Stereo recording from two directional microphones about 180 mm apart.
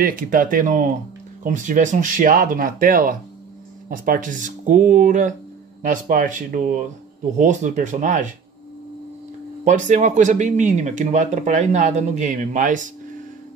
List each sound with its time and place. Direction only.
0.0 s speech: 50° right (ahead or behind)
9.7 s speech: 45° right (ahead or behind)